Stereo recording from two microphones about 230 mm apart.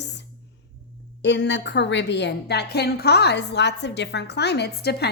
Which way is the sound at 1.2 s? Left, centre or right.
Left.